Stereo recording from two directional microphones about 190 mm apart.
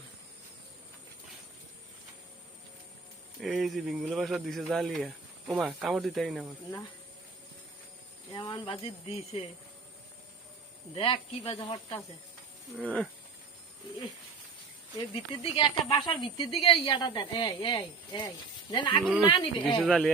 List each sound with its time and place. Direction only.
3.4 s speech: centre (ahead or behind)
8.3 s speech: 25° left (ahead or behind)
10.9 s speech: 25° left (ahead or behind)
12.7 s speech: 5° left (ahead or behind)
14.9 s speech: 25° left (ahead or behind)
19.8 s speech: centre (ahead or behind)